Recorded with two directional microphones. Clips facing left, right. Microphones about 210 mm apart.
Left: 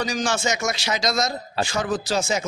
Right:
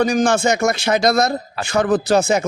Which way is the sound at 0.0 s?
55° right (ahead or behind).